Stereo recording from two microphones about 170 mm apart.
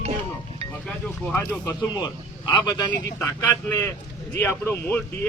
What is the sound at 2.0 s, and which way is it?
Speech, 25° left (ahead or behind).